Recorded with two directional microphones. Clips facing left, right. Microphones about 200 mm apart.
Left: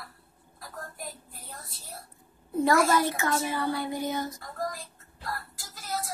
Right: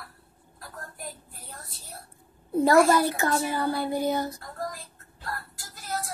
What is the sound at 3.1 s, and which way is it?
Speech, 35° right (ahead or behind).